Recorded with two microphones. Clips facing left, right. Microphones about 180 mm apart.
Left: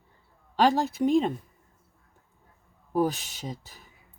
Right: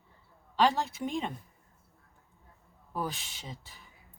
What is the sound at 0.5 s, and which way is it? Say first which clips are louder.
Speech: left 4 dB; 45° left (ahead or behind).